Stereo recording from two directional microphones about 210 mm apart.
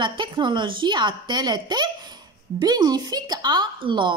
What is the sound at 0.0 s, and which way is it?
A woman's voice, 20° right (ahead or behind).